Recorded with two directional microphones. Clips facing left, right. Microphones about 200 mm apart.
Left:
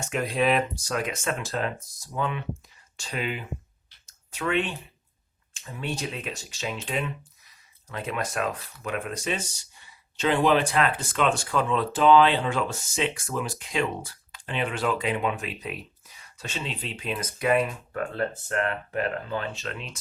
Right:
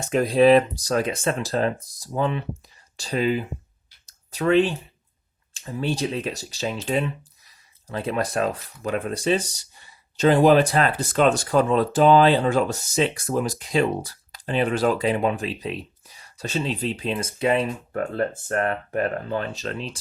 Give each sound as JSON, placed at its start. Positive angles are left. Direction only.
{"t": 0.0, "sound": "speech", "side_deg": -35}
{"t": 4.0, "sound": "a sound", "side_deg": -35}
{"t": 5.5, "sound": "speech", "side_deg": -30}